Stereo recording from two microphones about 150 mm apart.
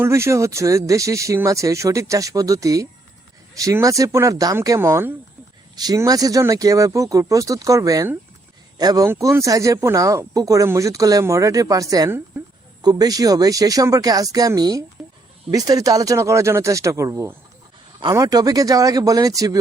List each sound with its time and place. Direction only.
0.0 s speech: 20° right (ahead or behind)